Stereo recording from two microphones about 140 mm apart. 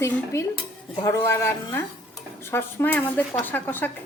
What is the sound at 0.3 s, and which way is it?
A woman's voice, 20° left (ahead or behind).